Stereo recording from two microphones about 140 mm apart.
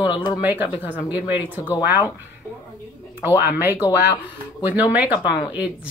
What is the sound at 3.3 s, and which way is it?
Speech, 15° right (ahead or behind).